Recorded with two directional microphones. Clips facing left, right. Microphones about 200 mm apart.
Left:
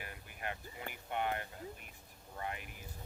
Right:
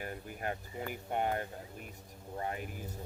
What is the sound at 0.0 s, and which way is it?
Speech, 40° right (ahead or behind).